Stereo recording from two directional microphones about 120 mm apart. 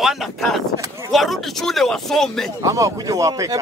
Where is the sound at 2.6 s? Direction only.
30° right (ahead or behind).